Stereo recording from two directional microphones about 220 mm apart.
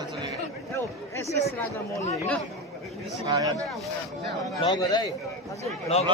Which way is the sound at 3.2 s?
15° right (ahead or behind).